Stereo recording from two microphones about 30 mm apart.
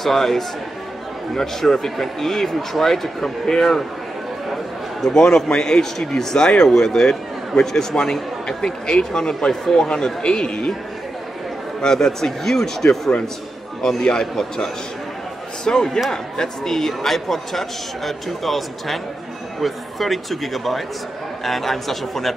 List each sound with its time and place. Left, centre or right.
0.0 s a man's voice: centre
5.1 s a man's voice: left
11.8 s speech: centre
13.8 s a man's voice: left
15.6 s a man's voice: left; by 22.3 s centre